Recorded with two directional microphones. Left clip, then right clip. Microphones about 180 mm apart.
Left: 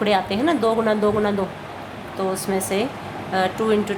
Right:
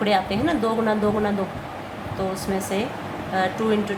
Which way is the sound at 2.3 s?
25° left (ahead or behind).